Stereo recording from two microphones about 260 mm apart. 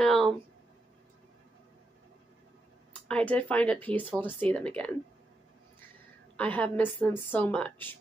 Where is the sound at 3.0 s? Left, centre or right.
Centre.